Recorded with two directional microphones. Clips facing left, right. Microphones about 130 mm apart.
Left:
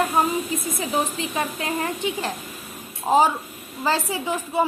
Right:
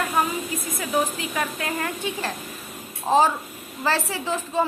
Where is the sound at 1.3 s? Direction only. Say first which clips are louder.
Left 1 dB; 25° left (ahead or behind).